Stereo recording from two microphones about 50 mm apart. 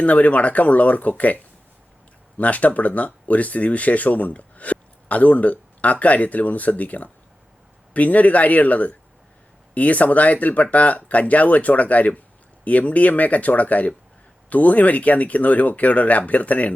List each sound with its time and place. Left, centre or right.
0.0 s speech: left
2.4 s speech: left